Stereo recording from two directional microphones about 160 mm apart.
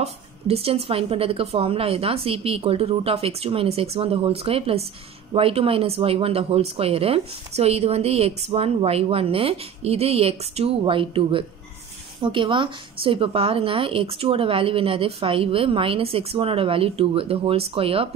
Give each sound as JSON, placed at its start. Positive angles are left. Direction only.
{"t": 0.0, "sound": "speech", "side_deg": -40}